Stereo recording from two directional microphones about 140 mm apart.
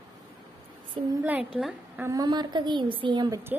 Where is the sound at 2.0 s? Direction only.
25° right (ahead or behind).